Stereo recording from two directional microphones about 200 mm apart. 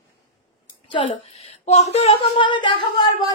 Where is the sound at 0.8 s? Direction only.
30° left (ahead or behind).